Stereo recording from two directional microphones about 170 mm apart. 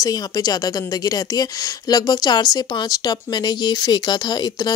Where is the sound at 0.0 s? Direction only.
20° left (ahead or behind).